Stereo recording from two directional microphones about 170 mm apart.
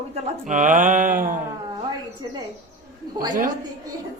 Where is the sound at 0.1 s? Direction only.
45° right (ahead or behind).